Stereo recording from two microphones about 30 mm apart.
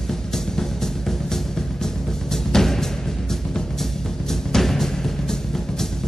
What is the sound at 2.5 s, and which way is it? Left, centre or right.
Music, centre.